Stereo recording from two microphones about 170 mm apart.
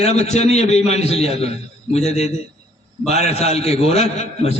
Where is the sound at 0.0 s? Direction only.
40° left (ahead or behind).